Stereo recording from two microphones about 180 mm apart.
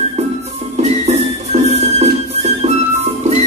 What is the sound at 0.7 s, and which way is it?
Music, 35° right (ahead or behind).